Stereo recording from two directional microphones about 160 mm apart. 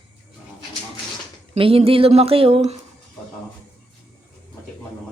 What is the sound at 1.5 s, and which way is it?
Speech, 35° right (ahead or behind).